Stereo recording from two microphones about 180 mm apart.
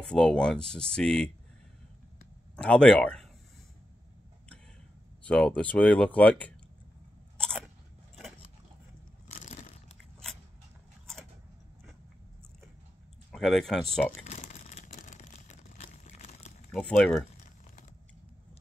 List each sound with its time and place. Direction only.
0.0 s speech: 5° left (ahead or behind)
2.5 s speech: 5° left (ahead or behind)
5.2 s speech: 5° left (ahead or behind)
7.3 s biting: 5° left (ahead or behind)
9.3 s a sound: 40° left (ahead or behind)
13.3 s speech: centre (ahead or behind)
14.2 s a sound: 40° left (ahead or behind)
16.7 s speech: 5° left (ahead or behind)